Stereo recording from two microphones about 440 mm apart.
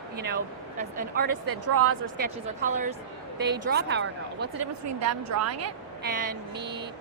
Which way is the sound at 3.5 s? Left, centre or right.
Right.